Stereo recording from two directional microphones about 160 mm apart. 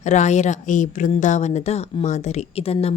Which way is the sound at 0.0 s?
50° left (ahead or behind).